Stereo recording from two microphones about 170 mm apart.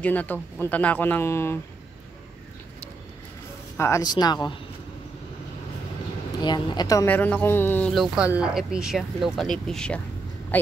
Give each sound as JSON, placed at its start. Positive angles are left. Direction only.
{"t": 0.0, "sound": "speech", "side_deg": 10}
{"t": 3.7, "sound": "speech", "side_deg": 15}
{"t": 6.4, "sound": "speech", "side_deg": 25}
{"t": 7.9, "sound": "speech", "side_deg": -5}